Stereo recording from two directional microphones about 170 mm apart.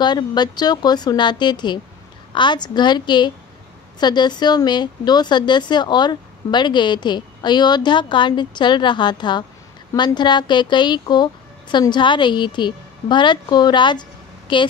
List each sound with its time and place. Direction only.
0.0 s speech: 25° left (ahead or behind)